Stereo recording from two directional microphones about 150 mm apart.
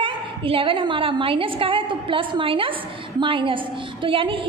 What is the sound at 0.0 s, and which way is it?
A woman's voice, 35° right (ahead or behind).